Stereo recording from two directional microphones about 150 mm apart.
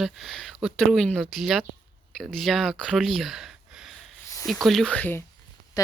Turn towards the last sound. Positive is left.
turn(degrees=25)  # may be behind; listen again after turning